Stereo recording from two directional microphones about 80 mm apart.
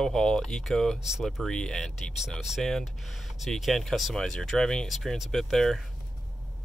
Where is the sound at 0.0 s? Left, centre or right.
Centre.